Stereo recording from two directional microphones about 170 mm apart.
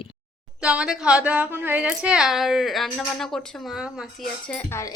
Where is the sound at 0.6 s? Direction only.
5° right (ahead or behind).